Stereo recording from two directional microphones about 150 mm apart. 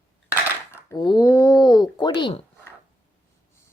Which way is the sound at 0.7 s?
20° left (ahead or behind).